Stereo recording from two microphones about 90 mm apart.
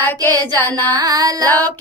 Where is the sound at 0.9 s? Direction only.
45° right (ahead or behind).